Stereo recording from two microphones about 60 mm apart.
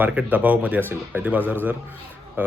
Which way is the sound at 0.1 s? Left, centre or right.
Right.